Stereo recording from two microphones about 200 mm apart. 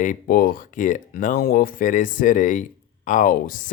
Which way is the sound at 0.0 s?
45° left (ahead or behind).